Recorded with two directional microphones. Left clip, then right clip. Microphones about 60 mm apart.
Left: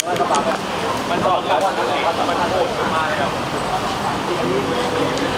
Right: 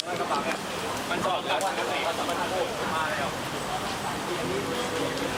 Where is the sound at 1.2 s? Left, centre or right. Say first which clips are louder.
Left 10 dB; right.